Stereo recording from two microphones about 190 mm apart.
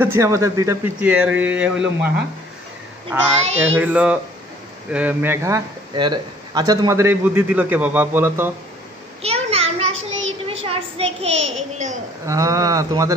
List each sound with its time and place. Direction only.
0.0 s a man's voice: 15° right (ahead or behind)
9.2 s a sound: 30° right (ahead or behind)
10.4 s child singing: 30° right (ahead or behind)
11.3 s child singing: 90° right
12.3 s a man's voice: 15° right (ahead or behind)